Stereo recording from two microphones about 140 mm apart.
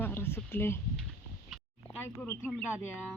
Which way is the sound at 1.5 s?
10° left (ahead or behind).